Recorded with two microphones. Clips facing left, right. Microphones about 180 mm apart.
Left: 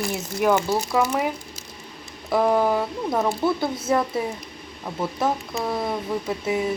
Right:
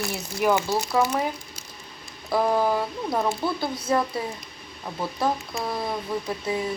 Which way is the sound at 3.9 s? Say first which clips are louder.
Left 1 dB; 15° left (ahead or behind).